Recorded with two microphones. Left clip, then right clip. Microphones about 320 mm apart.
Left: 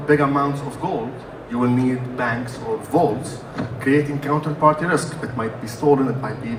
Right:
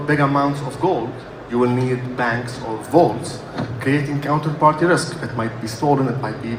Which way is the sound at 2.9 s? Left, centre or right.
Right.